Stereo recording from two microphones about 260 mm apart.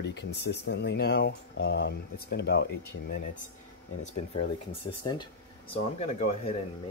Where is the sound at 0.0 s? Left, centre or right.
Left.